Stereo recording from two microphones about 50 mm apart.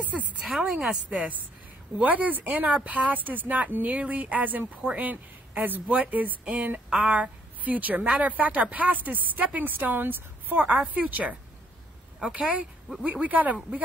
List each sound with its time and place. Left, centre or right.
0.0 s a sound: right
0.7 s speech: centre
1.0 s a woman's voice: right
12.2 s speech: centre
13.0 s speech: right